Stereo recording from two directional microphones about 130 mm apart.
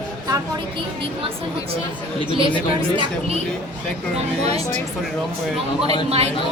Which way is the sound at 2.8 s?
50° right (ahead or behind).